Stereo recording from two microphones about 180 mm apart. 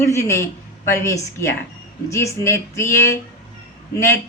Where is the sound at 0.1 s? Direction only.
15° left (ahead or behind).